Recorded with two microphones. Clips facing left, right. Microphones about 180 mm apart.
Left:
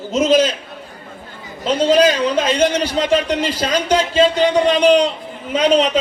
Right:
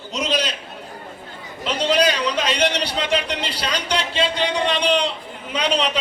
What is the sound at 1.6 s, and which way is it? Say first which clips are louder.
A man's voice: left 6 dB; 45° left (ahead or behind).